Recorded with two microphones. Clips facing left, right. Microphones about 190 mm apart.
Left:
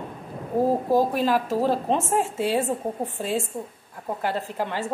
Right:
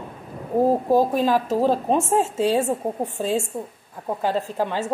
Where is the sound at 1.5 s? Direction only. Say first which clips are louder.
Right 3 dB; 15° right (ahead or behind).